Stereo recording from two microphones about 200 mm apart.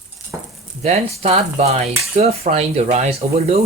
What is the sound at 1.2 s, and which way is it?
Speech, 30° right (ahead or behind).